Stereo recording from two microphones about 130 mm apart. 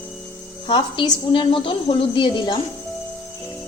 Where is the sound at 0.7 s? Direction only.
35° left (ahead or behind).